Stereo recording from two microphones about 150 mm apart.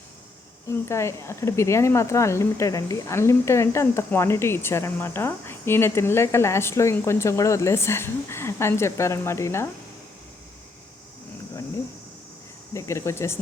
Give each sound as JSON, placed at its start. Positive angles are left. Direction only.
{"t": 0.7, "sound": "speech", "side_deg": 20}
{"t": 12.7, "sound": "speech", "side_deg": 20}